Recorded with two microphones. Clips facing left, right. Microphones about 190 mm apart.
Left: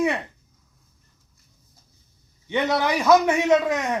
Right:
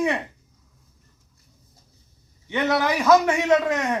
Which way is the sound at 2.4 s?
15° left (ahead or behind).